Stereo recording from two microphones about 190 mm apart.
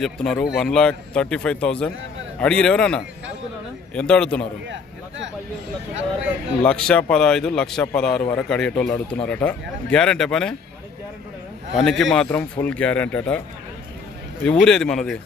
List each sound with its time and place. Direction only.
0.0 s speech: 5° left (ahead or behind)
4.7 s a sound: 75° right (ahead or behind)
6.6 s speech: 5° left (ahead or behind)
11.8 s a man's voice: centre (ahead or behind)
14.4 s speech: 5° left (ahead or behind)